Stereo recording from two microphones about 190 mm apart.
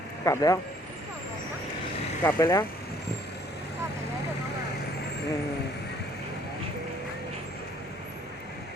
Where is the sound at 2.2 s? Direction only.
15° left (ahead or behind).